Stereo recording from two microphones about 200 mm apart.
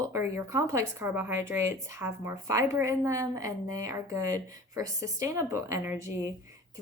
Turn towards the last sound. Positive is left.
turn(degrees=-10)  # may be behind; listen again after turning